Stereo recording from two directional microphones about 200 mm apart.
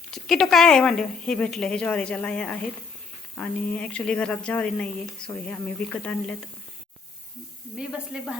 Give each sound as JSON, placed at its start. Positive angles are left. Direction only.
{"t": 0.1, "sound": "speech", "side_deg": 0}
{"t": 7.8, "sound": "speech", "side_deg": 0}